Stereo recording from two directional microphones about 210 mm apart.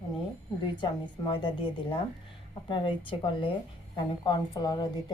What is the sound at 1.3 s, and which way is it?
A woman's voice, 20° left (ahead or behind).